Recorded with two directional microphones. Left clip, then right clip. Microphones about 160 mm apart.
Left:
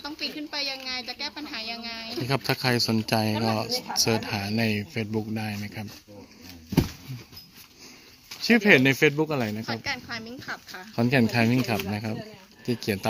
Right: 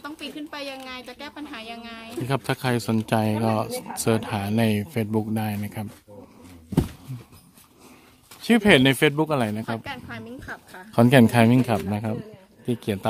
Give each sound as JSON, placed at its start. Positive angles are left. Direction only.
{"t": 0.0, "sound": "a woman's voice", "side_deg": -85}
{"t": 2.2, "sound": "speech", "side_deg": -10}
{"t": 8.5, "sound": "speech", "side_deg": -15}
{"t": 9.9, "sound": "speech", "side_deg": -30}
{"t": 10.4, "sound": "speech", "side_deg": -10}
{"t": 11.0, "sound": "speech", "side_deg": -30}